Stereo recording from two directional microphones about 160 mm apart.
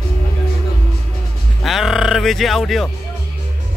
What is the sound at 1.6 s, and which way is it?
Speech, centre (ahead or behind).